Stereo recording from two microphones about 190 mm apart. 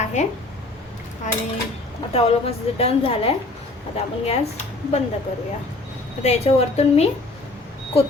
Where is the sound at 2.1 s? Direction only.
30° left (ahead or behind).